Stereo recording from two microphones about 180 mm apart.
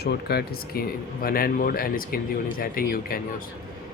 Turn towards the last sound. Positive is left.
turn(degrees=55)  # may be behind; listen again after turning